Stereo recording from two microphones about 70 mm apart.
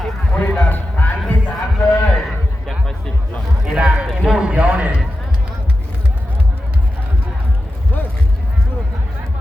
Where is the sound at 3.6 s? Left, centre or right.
Centre.